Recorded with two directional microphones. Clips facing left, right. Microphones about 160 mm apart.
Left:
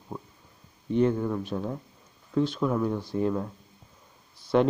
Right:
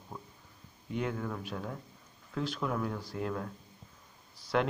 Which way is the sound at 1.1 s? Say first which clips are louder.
Left 8 dB; 15° left (ahead or behind).